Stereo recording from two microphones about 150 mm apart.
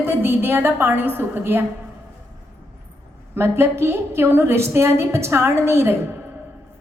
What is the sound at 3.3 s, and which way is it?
A woman's voice, 15° right (ahead or behind).